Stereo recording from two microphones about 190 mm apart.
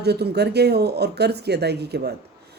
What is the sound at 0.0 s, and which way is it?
Speech, 60° right (ahead or behind).